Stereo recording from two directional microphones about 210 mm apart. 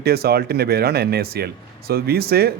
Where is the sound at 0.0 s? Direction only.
50° right (ahead or behind).